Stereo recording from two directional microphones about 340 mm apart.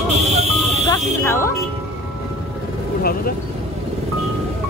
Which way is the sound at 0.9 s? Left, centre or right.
Centre.